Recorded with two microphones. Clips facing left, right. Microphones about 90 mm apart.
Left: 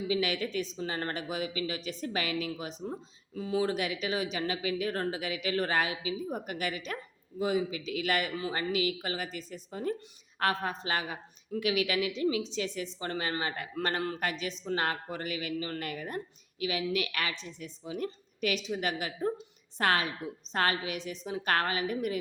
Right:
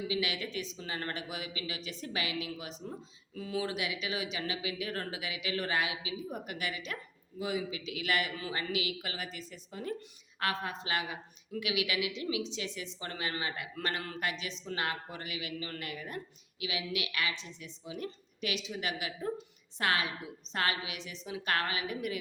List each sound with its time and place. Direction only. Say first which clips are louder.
0.1 s speech: left 4 dB; 40° left (ahead or behind)